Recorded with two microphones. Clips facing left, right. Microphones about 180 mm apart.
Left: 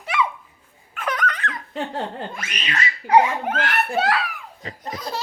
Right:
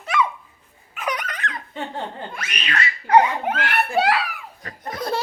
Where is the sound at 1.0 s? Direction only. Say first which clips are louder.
Left 2 dB; 15° right (ahead or behind).